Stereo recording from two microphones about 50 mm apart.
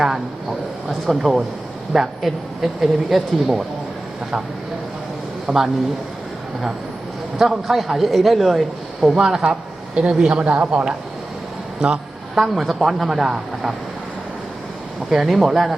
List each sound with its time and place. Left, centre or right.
0.9 s speech: centre
5.5 s a man's voice: centre
7.3 s a man's voice: centre
10.4 s a man's voice: right
11.8 s a man's voice: centre
15.1 s a man's voice: centre